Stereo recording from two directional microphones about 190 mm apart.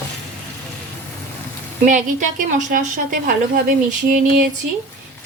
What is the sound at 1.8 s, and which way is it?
A woman's voice, 40° right (ahead or behind).